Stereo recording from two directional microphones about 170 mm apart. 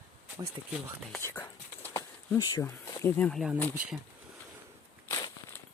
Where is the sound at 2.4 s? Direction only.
20° left (ahead or behind).